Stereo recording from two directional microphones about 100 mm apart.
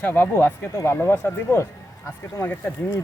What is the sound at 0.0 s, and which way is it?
Speech, 20° left (ahead or behind).